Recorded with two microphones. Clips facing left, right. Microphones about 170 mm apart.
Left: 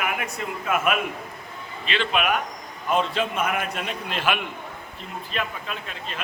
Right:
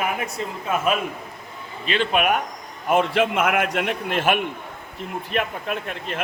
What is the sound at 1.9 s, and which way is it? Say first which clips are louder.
Speech: right 3 dB; 45° right (ahead or behind).